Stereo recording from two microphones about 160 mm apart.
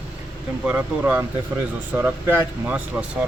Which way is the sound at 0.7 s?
10° right (ahead or behind).